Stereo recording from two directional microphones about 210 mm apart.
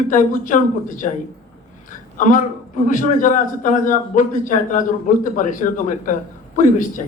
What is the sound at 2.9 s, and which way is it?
A man's voice, 40° left (ahead or behind).